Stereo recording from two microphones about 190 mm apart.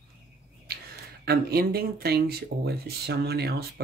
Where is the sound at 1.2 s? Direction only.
55° right (ahead or behind).